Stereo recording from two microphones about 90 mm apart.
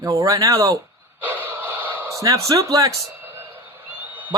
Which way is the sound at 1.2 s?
20° right (ahead or behind).